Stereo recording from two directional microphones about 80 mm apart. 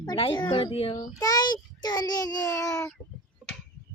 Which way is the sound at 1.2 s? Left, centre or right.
Left.